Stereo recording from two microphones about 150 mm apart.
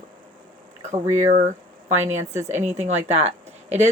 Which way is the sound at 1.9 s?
50° right (ahead or behind).